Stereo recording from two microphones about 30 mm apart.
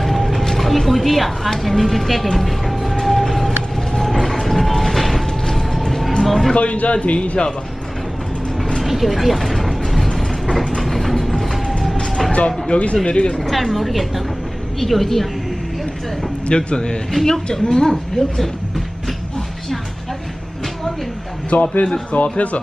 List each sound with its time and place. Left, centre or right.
0.0 s mechanisms: centre
1.6 s a woman's voice: centre
3.0 s vehicle: centre
5.2 s a sound: centre
5.9 s a sound: centre
6.2 s speech: centre
6.5 s a man's voice: left
8.8 s speech: centre
10.8 s train: centre
12.3 s speech: left
13.4 s a woman's voice: centre
16.4 s a woman's voice: left
21.5 s a man's voice: left